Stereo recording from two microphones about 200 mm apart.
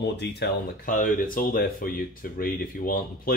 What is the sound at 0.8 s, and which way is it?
Speech, 45° left (ahead or behind).